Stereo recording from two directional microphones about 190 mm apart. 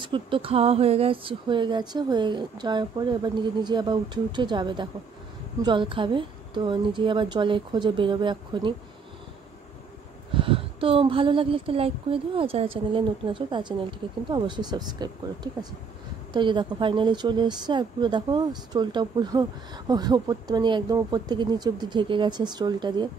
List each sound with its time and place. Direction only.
0.0 s speech: 25° right (ahead or behind)
10.3 s speech: 30° right (ahead or behind)